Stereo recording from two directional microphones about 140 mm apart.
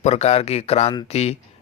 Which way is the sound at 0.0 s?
50° left (ahead or behind).